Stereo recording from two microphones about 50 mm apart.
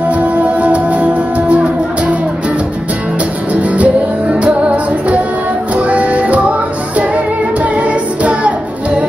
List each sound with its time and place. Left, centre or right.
0.1 s music: right
3.7 s music: right
5.8 s music: right
7.7 s music: right